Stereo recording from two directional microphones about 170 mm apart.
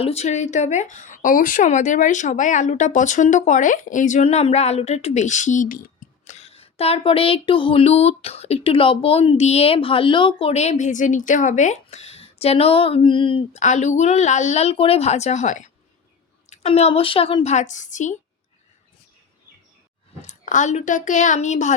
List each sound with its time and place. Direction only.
0.0 s speech: 40° left (ahead or behind)
6.2 s speech: 40° left (ahead or behind)
13.6 s speech: 45° left (ahead or behind)
20.2 s speech: 45° left (ahead or behind)